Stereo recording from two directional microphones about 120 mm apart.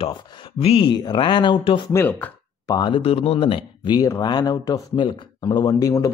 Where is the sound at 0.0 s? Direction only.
40° left (ahead or behind).